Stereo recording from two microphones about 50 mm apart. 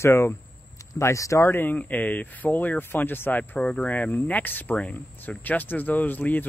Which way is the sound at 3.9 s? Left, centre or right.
Left.